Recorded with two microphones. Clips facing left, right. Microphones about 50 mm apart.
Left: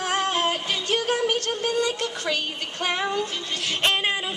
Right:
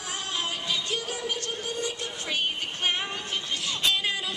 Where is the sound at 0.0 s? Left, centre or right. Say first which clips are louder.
Left 9 dB; left.